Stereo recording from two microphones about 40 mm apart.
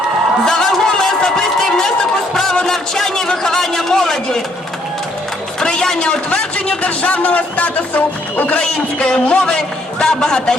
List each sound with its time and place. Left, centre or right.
0.4 s a sound: centre
2.3 s a man's voice: centre
5.5 s a man's voice: centre
6.8 s speech: left
8.5 s a man's voice: left